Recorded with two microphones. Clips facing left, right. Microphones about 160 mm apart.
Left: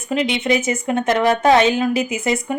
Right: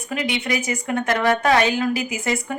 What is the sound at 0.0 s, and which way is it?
Speech, 25° left (ahead or behind).